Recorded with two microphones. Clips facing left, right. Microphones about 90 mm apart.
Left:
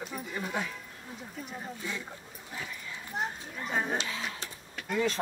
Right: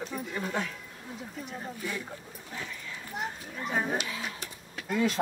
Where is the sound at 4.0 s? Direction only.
30° left (ahead or behind).